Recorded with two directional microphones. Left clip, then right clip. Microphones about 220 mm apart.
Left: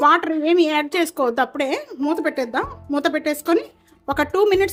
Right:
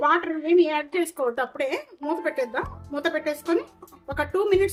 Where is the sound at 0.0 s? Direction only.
50° left (ahead or behind).